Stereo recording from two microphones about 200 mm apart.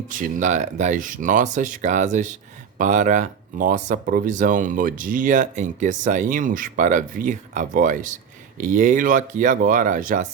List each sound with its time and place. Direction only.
0.1 s speech: 40° right (ahead or behind)